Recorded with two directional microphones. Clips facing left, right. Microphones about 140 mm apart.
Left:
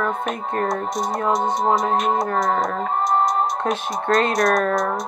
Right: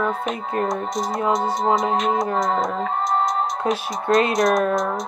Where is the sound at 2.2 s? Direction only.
20° right (ahead or behind).